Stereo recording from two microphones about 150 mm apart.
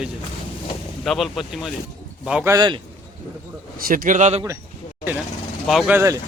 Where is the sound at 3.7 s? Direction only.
70° right (ahead or behind); by 4.4 s 50° right (ahead or behind).